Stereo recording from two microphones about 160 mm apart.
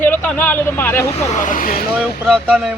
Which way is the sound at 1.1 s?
45° left (ahead or behind).